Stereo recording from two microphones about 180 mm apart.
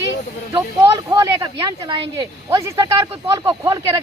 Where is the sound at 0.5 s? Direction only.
20° right (ahead or behind).